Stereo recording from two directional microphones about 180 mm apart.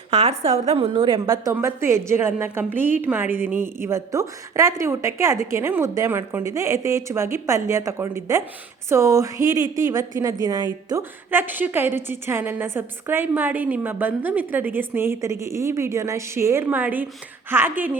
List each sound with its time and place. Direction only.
0.1 s a woman's voice: 35° right (ahead or behind); by 17.9 s 10° right (ahead or behind)